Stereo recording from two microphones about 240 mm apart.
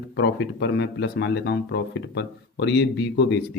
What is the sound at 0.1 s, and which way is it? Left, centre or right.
Speech, left.